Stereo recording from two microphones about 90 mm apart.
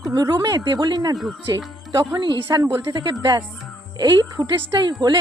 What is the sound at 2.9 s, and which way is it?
Speech, 55° right (ahead or behind).